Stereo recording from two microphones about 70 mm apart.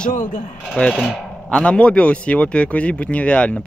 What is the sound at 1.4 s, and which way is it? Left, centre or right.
Speech, centre.